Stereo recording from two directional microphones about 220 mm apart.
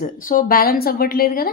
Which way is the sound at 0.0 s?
40° left (ahead or behind).